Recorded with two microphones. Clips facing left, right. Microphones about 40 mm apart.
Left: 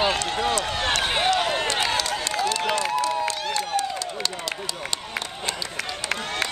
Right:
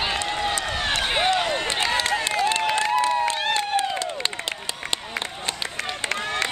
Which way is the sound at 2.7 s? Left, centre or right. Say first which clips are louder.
Right 3 dB; right.